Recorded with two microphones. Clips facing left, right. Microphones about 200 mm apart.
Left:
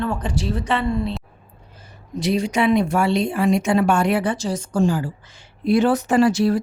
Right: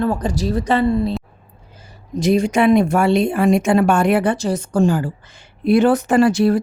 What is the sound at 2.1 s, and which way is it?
A woman's voice, 45° right (ahead or behind).